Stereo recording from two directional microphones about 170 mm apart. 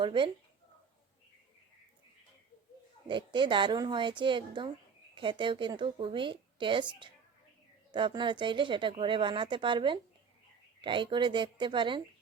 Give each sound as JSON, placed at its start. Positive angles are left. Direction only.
{"t": 0.0, "sound": "speech", "side_deg": -30}
{"t": 3.1, "sound": "speech", "side_deg": -30}
{"t": 7.9, "sound": "speech", "side_deg": -30}